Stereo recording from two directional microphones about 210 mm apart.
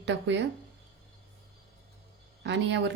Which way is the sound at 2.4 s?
55° right (ahead or behind).